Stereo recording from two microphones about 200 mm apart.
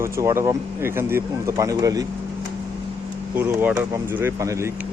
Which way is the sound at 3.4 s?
10° right (ahead or behind).